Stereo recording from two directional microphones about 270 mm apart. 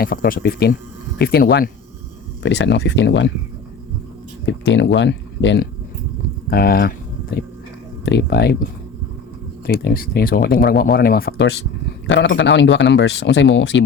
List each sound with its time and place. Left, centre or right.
0.0 s a man's voice: left
4.6 s speech: left
9.6 s a man's voice: left